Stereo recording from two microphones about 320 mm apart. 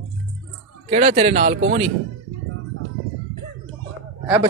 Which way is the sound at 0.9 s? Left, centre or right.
Right.